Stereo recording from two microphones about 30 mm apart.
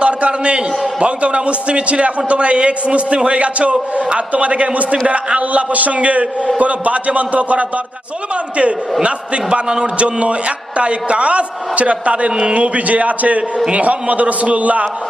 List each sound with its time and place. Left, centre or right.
0.0 s a man's voice: right